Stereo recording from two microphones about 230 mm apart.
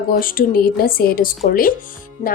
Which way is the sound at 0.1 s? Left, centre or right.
Left.